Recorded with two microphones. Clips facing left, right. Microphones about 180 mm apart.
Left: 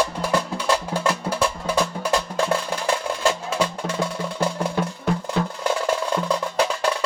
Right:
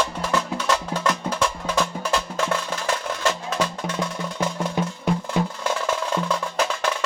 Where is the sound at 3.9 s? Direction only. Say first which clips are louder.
Left 3 dB; 30° left (ahead or behind).